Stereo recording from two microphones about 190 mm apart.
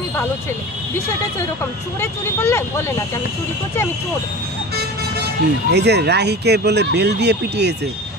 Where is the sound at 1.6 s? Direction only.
15° left (ahead or behind).